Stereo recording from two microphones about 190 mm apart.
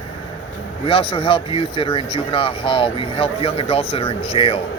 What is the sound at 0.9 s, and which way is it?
Speech, 30° left (ahead or behind).